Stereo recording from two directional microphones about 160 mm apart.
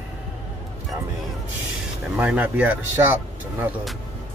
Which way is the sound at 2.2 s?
10° right (ahead or behind).